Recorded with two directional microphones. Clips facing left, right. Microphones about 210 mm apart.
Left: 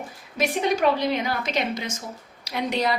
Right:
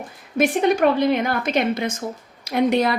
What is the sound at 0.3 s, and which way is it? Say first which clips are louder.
A woman's voice: right 5 dB; 55° right (ahead or behind).